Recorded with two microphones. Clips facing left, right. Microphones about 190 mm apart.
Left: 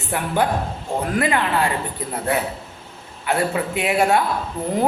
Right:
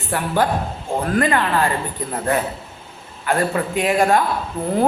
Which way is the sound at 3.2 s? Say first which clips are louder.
Right 1 dB; 10° left (ahead or behind).